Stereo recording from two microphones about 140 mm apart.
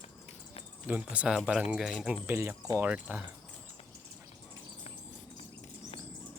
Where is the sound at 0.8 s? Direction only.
10° right (ahead or behind).